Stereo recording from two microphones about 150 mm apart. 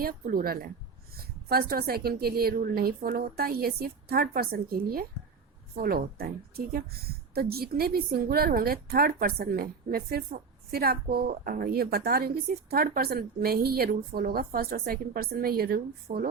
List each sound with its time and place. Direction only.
0.0 s a woman's voice: 75° right (ahead or behind); by 16.3 s 90° right